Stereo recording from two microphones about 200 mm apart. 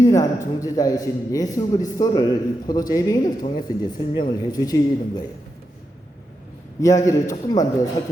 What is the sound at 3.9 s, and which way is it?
Speech, 20° left (ahead or behind).